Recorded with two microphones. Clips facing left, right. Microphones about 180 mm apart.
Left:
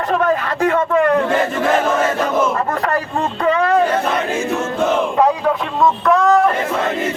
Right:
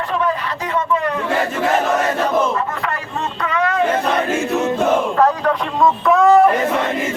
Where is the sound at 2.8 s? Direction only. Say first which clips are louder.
Left 5 dB; 35° left (ahead or behind).